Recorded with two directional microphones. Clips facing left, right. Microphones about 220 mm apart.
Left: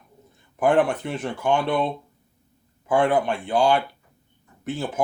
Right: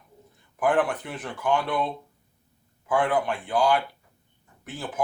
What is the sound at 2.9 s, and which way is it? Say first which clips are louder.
Speech: left 4 dB; 25° left (ahead or behind).